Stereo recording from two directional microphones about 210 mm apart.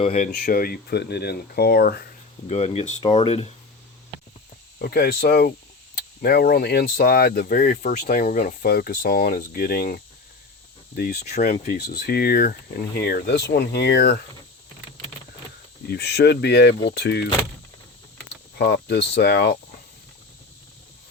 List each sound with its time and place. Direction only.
0.0 s speech: 35° left (ahead or behind)
2.5 s speech: 30° left (ahead or behind)
4.8 s speech: 45° left (ahead or behind)
11.3 s speech: 35° left (ahead or behind); by 14.2 s 55° left (ahead or behind)
15.9 s speech: 50° left (ahead or behind)
18.5 s speech: 50° left (ahead or behind)